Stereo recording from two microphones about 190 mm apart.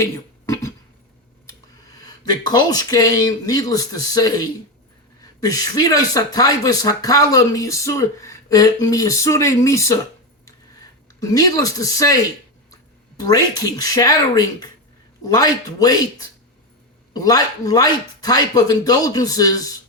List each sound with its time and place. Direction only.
0.0 s a sound: 15° left (ahead or behind)
2.0 s speech: 20° left (ahead or behind)
11.2 s speech: 20° left (ahead or behind)
17.2 s speech: 20° left (ahead or behind)